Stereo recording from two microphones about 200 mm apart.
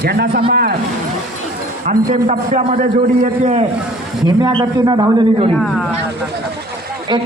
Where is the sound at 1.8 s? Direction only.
45° right (ahead or behind).